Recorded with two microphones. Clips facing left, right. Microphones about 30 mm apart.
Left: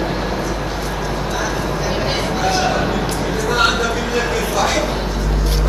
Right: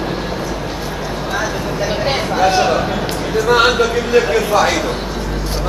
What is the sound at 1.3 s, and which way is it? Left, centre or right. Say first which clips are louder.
Vehicle: right 3 dB; centre.